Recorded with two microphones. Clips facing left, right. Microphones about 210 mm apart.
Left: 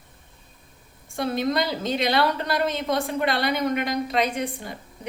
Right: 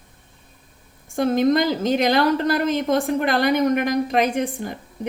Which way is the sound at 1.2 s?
45° right (ahead or behind).